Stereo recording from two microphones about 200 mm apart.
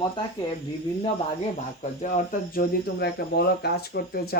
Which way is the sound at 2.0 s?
40° left (ahead or behind).